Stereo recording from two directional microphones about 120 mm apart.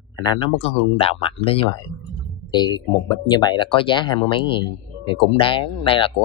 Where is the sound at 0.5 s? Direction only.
55° left (ahead or behind).